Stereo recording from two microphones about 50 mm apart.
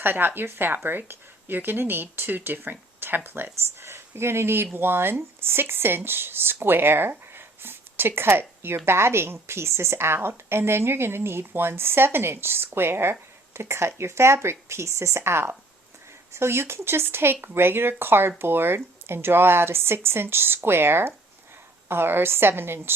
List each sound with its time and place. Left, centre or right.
0.0 s a woman's voice: right